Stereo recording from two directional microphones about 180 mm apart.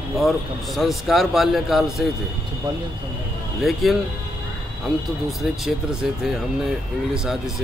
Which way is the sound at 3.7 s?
Centre (ahead or behind).